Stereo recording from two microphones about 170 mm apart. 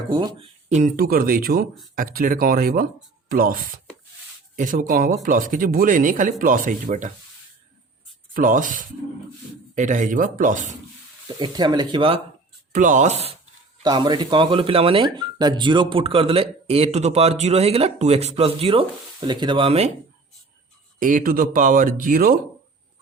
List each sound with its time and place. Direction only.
0.1 s speech: 30° right (ahead or behind)
0.9 s speech: 60° right (ahead or behind)
8.3 s speech: 50° right (ahead or behind)
11.3 s speech: 25° right (ahead or behind)
12.7 s speech: 50° right (ahead or behind)
13.8 s speech: 25° right (ahead or behind)
21.0 s speech: 50° right (ahead or behind)